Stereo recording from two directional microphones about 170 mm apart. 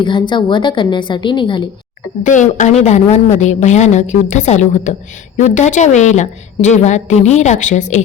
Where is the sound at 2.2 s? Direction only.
45° left (ahead or behind).